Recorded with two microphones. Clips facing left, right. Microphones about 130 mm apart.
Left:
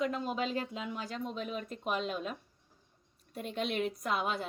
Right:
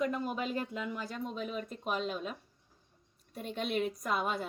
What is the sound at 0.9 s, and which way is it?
Speech, centre (ahead or behind).